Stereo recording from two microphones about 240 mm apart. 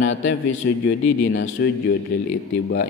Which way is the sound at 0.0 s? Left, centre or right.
Left.